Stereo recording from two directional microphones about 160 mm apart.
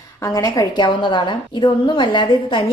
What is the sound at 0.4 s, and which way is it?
A woman's voice, 25° left (ahead or behind).